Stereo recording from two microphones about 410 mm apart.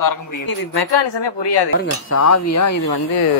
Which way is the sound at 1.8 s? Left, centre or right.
Left.